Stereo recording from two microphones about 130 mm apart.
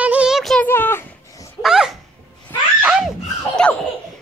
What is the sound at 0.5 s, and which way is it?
Speech, 15° left (ahead or behind).